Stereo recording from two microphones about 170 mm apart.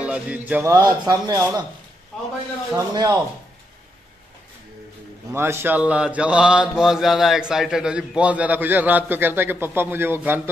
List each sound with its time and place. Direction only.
0.0 s mantra: 5° right (ahead or behind)
2.7 s speech: 20° right (ahead or behind)
5.3 s mantra: 15° right (ahead or behind)